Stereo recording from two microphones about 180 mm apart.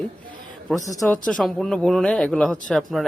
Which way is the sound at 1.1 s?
5° left (ahead or behind).